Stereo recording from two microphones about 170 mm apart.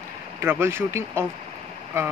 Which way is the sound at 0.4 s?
15° right (ahead or behind).